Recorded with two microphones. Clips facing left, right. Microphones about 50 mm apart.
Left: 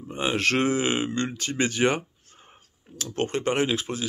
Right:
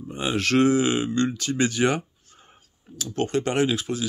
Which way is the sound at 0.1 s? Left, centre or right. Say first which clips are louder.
Right 1 dB; left.